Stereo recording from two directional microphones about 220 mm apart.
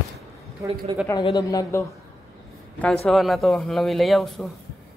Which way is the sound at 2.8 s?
Centre (ahead or behind).